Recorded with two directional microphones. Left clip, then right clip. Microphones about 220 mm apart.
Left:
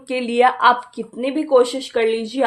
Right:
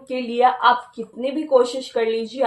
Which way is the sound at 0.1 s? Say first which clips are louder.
Left 2 dB; 50° left (ahead or behind).